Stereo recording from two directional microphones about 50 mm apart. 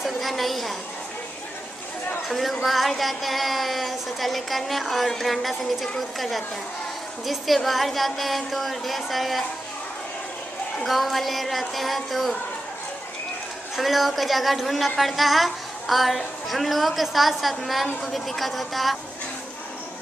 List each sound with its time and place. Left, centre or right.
0.0 s a sound: centre
2.2 s child singing: centre
10.8 s child singing: centre
13.7 s child singing: centre